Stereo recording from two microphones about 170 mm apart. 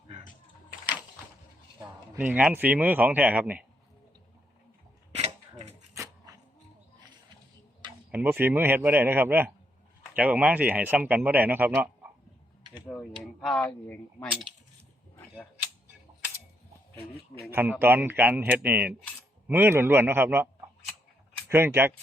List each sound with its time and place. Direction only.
1.8 s speech: 10° right (ahead or behind)
5.1 s a sound: 40° right (ahead or behind)
5.9 s dog: 20° right (ahead or behind)
8.1 s speech: 10° right (ahead or behind)
12.9 s speech: centre (ahead or behind)
17.5 s speech: 10° right (ahead or behind)
21.5 s speech: 15° right (ahead or behind)